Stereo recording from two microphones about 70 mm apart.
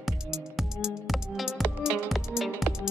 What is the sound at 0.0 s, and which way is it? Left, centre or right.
Music, centre.